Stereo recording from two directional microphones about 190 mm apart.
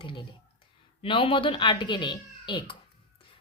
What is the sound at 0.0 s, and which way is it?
Speech, 25° left (ahead or behind).